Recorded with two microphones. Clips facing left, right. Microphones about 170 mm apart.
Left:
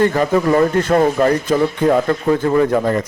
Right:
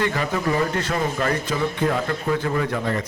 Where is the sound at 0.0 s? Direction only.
45° left (ahead or behind).